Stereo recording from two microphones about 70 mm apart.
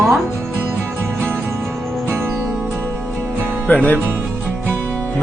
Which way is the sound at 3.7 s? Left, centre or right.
Left.